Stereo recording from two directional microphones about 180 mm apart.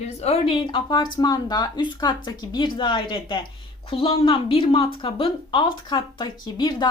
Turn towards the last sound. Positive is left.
turn(degrees=25)  # may be behind; listen again after turning